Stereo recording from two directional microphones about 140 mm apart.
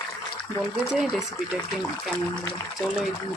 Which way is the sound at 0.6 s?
5° right (ahead or behind).